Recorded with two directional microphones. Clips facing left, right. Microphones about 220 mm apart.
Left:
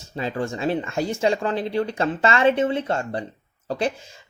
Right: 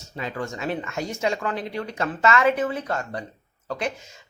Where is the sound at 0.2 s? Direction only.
30° left (ahead or behind).